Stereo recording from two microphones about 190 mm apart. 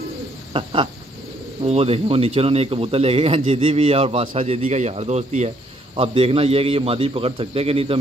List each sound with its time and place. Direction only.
0.5 s a man's voice: 30° right (ahead or behind)